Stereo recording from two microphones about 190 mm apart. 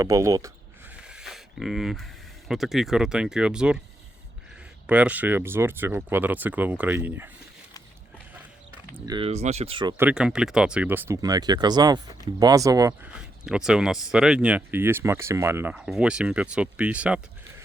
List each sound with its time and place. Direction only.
0.0 s speech: 15° right (ahead or behind)
0.9 s a sound: 5° right (ahead or behind)
2.5 s speech: centre (ahead or behind)
4.9 s speech: 5° right (ahead or behind)
8.9 s speech: 20° right (ahead or behind)
9.2 s speech: 35° right (ahead or behind)
10.0 s speech: 5° right (ahead or behind)
13.1 s speech: 5° right (ahead or behind)